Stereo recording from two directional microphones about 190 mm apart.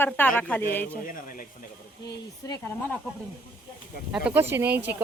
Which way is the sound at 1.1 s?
45° left (ahead or behind).